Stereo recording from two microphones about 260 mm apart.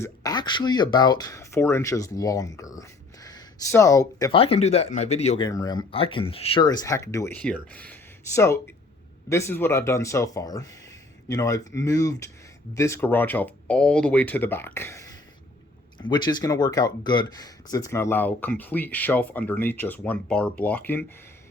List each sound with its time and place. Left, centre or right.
0.0 s speech: centre
5.5 s speech: centre